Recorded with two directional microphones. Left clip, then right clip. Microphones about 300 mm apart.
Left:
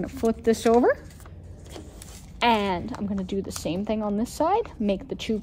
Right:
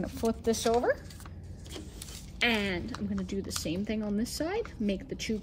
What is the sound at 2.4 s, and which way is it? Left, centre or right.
A woman's voice, left.